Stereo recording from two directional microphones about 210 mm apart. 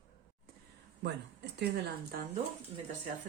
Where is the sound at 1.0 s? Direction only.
55° right (ahead or behind).